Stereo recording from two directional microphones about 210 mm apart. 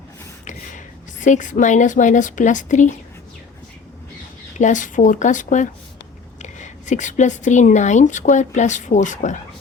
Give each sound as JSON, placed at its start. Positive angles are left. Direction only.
{"t": 1.2, "sound": "a woman's voice", "side_deg": 35}
{"t": 4.5, "sound": "a woman's voice", "side_deg": 35}